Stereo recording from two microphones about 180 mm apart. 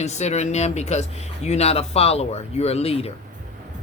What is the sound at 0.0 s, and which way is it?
Speech, 40° left (ahead or behind).